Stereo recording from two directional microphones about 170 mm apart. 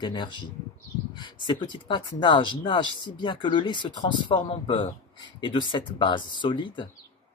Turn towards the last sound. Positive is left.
turn(degrees=30)  # may be behind; listen again after turning